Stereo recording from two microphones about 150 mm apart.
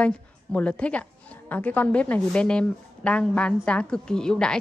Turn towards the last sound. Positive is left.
turn(degrees=5)  # may be behind; listen again after turning